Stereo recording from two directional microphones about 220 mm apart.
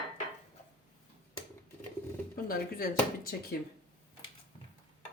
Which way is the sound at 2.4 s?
40° left (ahead or behind).